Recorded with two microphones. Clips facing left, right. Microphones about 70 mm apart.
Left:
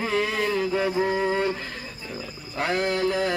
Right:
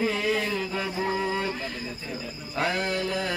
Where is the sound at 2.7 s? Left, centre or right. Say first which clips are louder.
Left 7 dB; left.